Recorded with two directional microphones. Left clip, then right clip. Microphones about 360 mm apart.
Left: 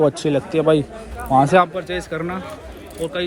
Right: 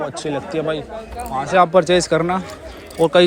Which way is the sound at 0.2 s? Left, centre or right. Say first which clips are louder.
Left 3 dB; centre.